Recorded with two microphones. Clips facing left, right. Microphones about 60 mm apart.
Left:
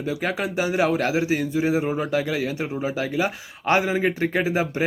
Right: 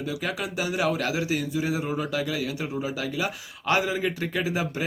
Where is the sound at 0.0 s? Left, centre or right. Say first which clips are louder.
Left 4 dB; left.